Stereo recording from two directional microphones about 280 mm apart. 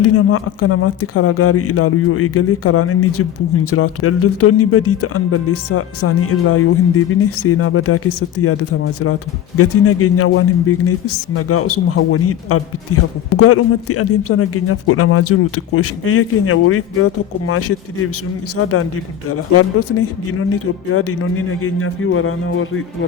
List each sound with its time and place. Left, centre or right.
0.0 s speech: left